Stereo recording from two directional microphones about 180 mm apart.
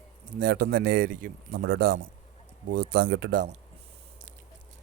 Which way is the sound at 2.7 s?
75° right (ahead or behind).